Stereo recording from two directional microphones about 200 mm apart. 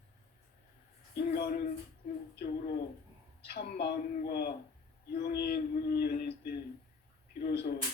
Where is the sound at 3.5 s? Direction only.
50° left (ahead or behind).